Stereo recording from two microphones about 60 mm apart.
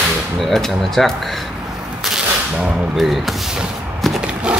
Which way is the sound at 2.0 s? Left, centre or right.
Centre.